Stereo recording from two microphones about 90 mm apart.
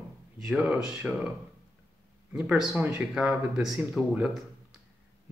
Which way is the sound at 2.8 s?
20° right (ahead or behind).